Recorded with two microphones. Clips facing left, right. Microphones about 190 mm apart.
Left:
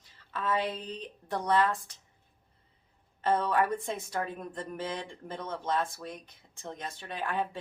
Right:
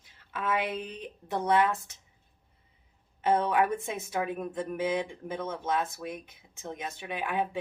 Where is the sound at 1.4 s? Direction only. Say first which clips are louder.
Right 2 dB; 5° right (ahead or behind).